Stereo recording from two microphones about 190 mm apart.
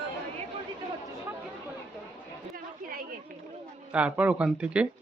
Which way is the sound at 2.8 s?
50° right (ahead or behind).